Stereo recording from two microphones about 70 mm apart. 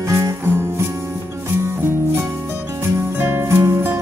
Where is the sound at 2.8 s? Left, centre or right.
Right.